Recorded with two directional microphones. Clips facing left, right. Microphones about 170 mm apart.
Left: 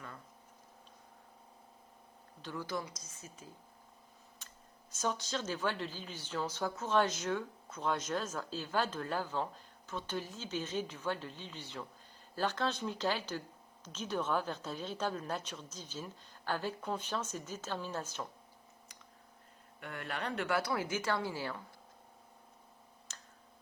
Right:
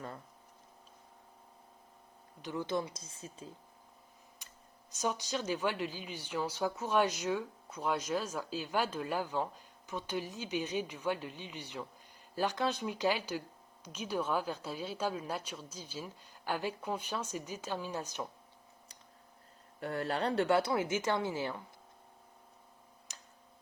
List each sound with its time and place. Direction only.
2.4 s a woman's voice: 20° right (ahead or behind)
4.4 s a sound: 15° right (ahead or behind)
4.9 s speech: 15° right (ahead or behind)
19.8 s a woman's voice: 35° right (ahead or behind)
23.1 s tick-tock: 15° right (ahead or behind)